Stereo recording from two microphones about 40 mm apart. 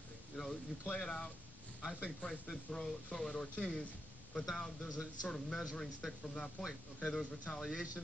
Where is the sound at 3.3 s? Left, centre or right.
Left.